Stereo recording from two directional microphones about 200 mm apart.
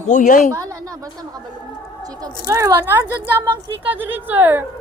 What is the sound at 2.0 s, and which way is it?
Speech, 20° right (ahead or behind).